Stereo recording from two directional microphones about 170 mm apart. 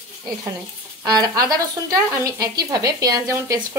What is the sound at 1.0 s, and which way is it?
Speech, 20° right (ahead or behind).